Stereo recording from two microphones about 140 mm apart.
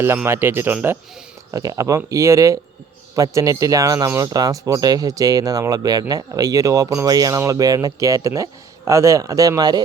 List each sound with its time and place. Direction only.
0.3 s speech: 15° right (ahead or behind)